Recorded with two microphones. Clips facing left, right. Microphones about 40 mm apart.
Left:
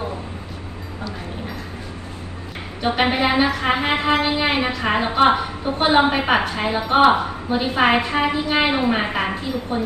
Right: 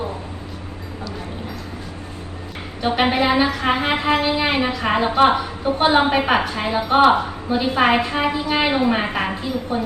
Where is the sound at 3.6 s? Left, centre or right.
Centre.